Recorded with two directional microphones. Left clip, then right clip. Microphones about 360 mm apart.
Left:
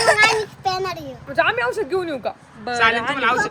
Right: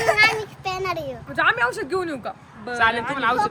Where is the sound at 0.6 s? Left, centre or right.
Centre.